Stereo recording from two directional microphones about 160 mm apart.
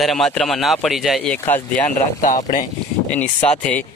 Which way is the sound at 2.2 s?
50° left (ahead or behind).